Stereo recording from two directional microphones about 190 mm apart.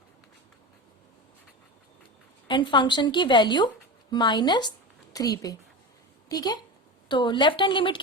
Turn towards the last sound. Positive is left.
turn(degrees=25)  # may be behind; listen again after turning